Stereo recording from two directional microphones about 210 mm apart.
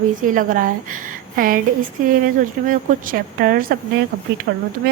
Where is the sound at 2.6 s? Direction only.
40° right (ahead or behind).